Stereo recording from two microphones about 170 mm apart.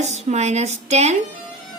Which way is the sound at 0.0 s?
40° right (ahead or behind).